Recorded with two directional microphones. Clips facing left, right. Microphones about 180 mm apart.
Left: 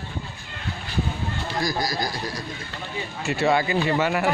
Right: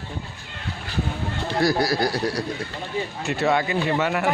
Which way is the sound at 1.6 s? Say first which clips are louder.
Right 6 dB; 65° right (ahead or behind).